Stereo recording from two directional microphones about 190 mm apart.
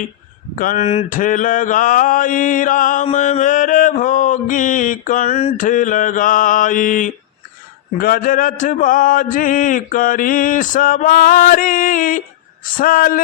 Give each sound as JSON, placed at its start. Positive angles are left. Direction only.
{"t": 0.6, "sound": "mantra", "side_deg": 45}